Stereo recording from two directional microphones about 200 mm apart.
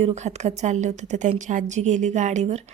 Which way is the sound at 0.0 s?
35° right (ahead or behind).